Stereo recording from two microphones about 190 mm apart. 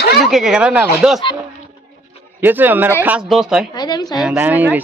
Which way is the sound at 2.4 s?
10° right (ahead or behind).